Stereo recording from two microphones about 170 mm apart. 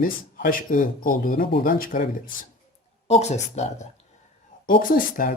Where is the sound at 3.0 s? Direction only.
40° left (ahead or behind).